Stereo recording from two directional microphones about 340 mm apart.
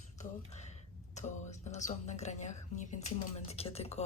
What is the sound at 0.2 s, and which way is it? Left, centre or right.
Speech, centre.